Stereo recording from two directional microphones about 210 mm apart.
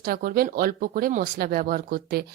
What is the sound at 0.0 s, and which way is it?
Speech, 45° right (ahead or behind).